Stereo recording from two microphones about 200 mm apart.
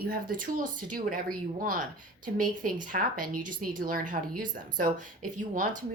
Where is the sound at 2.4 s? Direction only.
45° right (ahead or behind).